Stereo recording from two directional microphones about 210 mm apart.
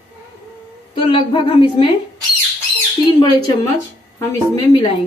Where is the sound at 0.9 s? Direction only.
25° left (ahead or behind).